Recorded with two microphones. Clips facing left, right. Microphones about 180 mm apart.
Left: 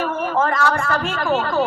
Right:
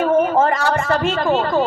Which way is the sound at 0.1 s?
25° right (ahead or behind).